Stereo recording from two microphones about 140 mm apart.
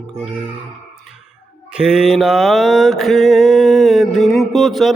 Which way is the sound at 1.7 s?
5° right (ahead or behind).